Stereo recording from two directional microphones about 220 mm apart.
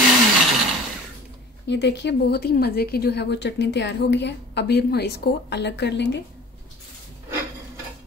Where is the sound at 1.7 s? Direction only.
50° left (ahead or behind).